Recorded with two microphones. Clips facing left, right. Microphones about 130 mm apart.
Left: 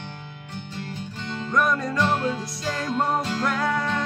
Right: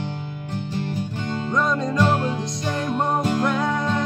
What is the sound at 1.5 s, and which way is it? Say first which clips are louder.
Music: even; 20° right (ahead or behind).